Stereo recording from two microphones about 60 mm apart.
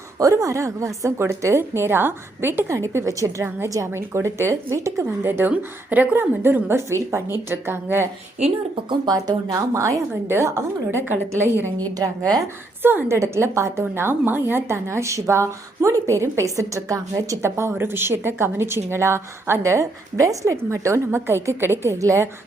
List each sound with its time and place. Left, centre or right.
0.2 s a woman's voice: right
2.7 s speech: right
3.9 s a woman's voice: right
5.2 s a woman's voice: right
5.5 s a woman's voice: right
9.0 s a woman's voice: right
10.2 s a woman's voice: right
11.9 s a woman's voice: right
12.8 s a woman's voice: right
13.1 s a woman's voice: right
17.6 s a woman's voice: right
21.1 s a woman's voice: right
21.9 s speech: right